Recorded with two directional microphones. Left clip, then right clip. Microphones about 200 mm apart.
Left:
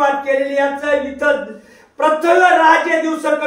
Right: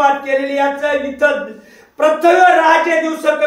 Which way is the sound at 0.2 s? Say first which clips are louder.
Even; 25° right (ahead or behind).